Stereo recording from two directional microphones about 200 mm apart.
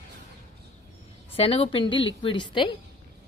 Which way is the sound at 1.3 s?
30° left (ahead or behind).